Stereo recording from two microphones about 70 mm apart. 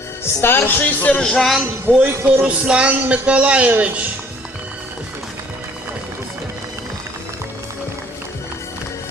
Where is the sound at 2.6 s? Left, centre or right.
Centre.